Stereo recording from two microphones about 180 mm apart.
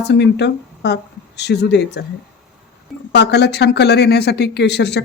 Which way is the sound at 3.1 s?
70° left (ahead or behind).